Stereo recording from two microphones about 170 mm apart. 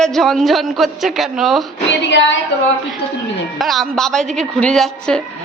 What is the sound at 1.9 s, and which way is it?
Female singing, 90° left.